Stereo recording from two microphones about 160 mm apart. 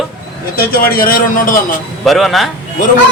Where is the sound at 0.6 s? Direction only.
65° left (ahead or behind).